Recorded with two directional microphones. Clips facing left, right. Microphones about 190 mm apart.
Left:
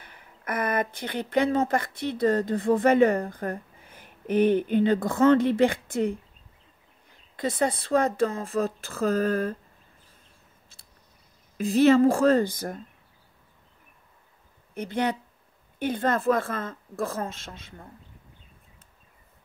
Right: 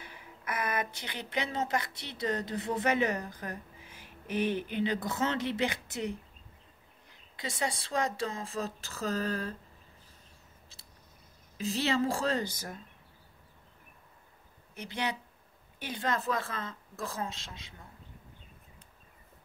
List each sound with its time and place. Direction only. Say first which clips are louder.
0.0 s speech: left 3 dB; 55° left (ahead or behind)
11.5 s speech: left 12 dB; 50° left (ahead or behind)
14.7 s speech: left 8 dB; 55° left (ahead or behind)